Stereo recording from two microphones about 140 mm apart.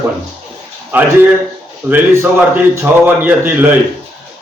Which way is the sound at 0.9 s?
10° right (ahead or behind).